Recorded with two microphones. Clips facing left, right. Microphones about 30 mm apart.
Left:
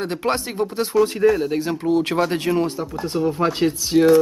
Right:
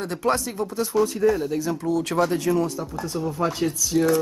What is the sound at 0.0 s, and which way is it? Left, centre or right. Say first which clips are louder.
Speech: left 1 dB; left.